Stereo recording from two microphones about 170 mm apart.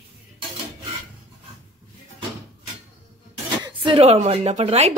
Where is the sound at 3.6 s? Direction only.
25° right (ahead or behind).